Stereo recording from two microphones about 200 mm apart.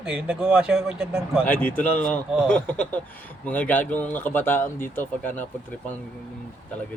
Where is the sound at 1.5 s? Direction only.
10° left (ahead or behind).